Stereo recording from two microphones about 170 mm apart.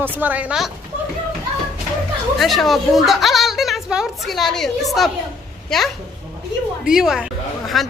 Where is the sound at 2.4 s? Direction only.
Centre (ahead or behind).